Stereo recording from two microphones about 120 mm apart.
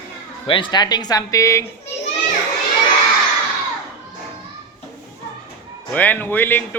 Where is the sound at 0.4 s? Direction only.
45° left (ahead or behind); by 1.6 s 25° left (ahead or behind).